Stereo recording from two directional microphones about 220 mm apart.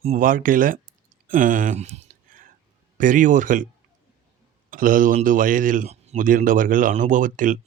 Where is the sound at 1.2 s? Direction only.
35° right (ahead or behind).